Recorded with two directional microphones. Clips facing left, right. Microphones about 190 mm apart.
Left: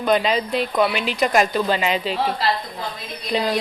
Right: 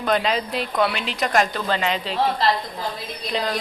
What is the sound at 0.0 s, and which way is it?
Speech, 5° left (ahead or behind).